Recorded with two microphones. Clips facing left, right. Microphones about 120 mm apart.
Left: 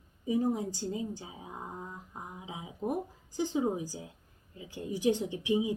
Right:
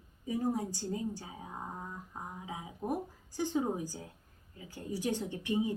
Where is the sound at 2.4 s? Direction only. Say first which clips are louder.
Even; 20° left (ahead or behind).